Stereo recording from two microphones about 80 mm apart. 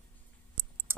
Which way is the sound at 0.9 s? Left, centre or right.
Right.